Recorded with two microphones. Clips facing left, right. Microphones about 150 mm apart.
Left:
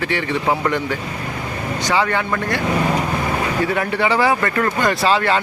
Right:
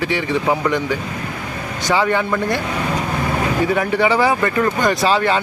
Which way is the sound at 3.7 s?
5° right (ahead or behind).